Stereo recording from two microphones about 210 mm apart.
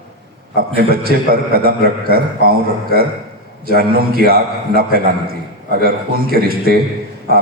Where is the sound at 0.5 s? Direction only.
45° right (ahead or behind).